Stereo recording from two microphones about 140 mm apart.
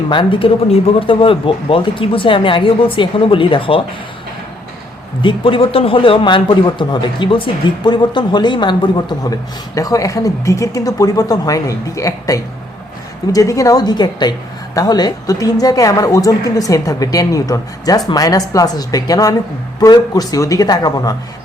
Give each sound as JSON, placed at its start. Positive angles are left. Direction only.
{"t": 0.1, "sound": "a man's voice", "side_deg": 35}
{"t": 5.2, "sound": "a man's voice", "side_deg": 40}